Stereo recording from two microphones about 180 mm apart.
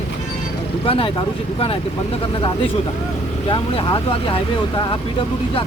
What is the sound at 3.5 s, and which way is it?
Speech, 30° left (ahead or behind).